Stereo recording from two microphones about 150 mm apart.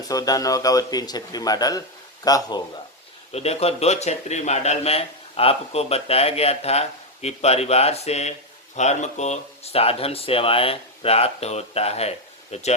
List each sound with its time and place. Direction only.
0.1 s speech: 25° left (ahead or behind)
3.3 s a man's voice: 45° left (ahead or behind)